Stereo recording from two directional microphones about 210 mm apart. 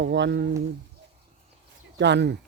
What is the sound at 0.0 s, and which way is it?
Speech, 60° right (ahead or behind).